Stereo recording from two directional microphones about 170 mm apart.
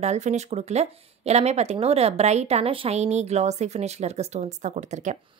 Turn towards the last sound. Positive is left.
turn(degrees=-45)  # may be behind; listen again after turning